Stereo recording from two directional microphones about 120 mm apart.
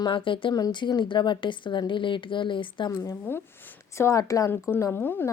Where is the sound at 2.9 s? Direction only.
30° left (ahead or behind).